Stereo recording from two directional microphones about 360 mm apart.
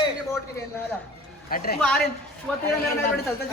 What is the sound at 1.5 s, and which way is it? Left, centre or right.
Speech, left.